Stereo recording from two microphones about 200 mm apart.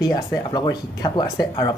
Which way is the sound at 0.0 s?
20° left (ahead or behind).